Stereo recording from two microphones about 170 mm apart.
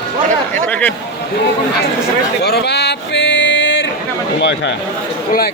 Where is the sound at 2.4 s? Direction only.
75° left (ahead or behind).